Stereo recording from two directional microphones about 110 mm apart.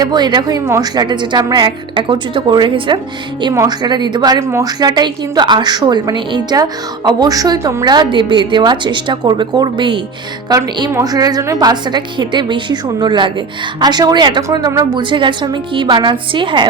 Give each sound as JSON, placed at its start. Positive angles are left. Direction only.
{"t": 0.0, "sound": "a woman's voice", "side_deg": -40}
{"t": 7.9, "sound": "a woman's voice", "side_deg": -45}
{"t": 11.0, "sound": "a woman's voice", "side_deg": -35}
{"t": 14.4, "sound": "a woman's voice", "side_deg": -30}
{"t": 15.1, "sound": "a woman's voice", "side_deg": -45}